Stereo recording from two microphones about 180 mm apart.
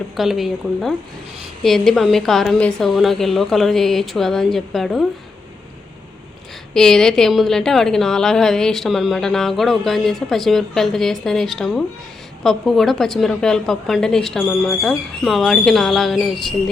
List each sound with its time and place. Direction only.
0.2 s a woman's voice: centre (ahead or behind)
6.7 s a woman's voice: 5° left (ahead or behind)